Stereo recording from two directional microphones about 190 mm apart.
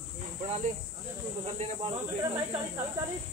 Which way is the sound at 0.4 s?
35° right (ahead or behind).